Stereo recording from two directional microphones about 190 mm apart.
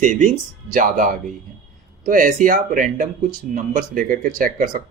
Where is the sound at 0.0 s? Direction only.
40° right (ahead or behind).